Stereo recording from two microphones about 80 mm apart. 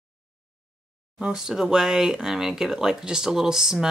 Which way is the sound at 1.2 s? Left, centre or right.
Centre.